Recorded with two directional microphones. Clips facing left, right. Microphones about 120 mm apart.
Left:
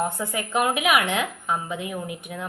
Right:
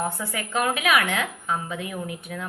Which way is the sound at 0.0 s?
20° left (ahead or behind).